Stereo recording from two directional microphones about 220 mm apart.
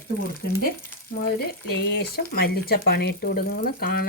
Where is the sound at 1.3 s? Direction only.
45° left (ahead or behind).